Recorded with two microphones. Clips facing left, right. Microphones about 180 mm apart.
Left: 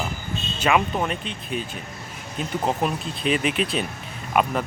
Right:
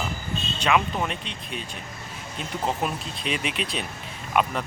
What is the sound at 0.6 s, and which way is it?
Speech, 5° left (ahead or behind).